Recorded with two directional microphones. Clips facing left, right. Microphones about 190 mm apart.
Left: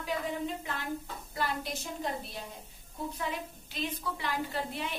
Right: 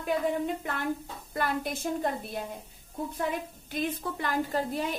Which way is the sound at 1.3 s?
55° right (ahead or behind).